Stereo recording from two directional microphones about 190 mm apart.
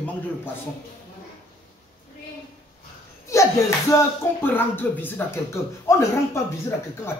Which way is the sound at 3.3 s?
15° left (ahead or behind).